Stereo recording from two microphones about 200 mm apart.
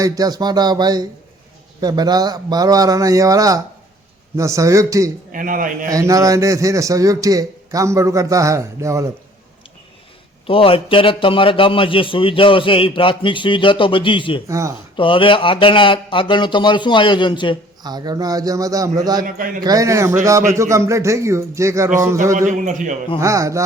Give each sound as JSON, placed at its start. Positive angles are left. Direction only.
{"t": 0.0, "sound": "a man's voice", "side_deg": -20}
{"t": 5.3, "sound": "a man's voice", "side_deg": -40}
{"t": 5.9, "sound": "a man's voice", "side_deg": -15}
{"t": 10.4, "sound": "a man's voice", "side_deg": 25}
{"t": 14.4, "sound": "a man's voice", "side_deg": -15}
{"t": 14.9, "sound": "a man's voice", "side_deg": 25}
{"t": 17.8, "sound": "a man's voice", "side_deg": -20}
{"t": 19.2, "sound": "a man's voice", "side_deg": -45}
{"t": 19.6, "sound": "a man's voice", "side_deg": -15}
{"t": 22.4, "sound": "a man's voice", "side_deg": -40}
{"t": 23.1, "sound": "a man's voice", "side_deg": -15}